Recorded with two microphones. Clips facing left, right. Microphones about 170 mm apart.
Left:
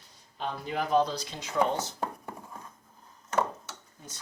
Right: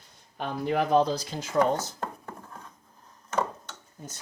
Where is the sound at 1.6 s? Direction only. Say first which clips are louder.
Right 3 dB; 40° right (ahead or behind).